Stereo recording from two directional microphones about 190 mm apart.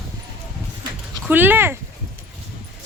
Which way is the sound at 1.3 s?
10° right (ahead or behind).